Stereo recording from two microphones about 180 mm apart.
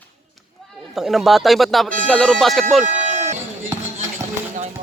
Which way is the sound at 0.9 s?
Centre (ahead or behind).